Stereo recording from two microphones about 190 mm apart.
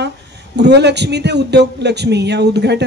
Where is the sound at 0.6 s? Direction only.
60° right (ahead or behind).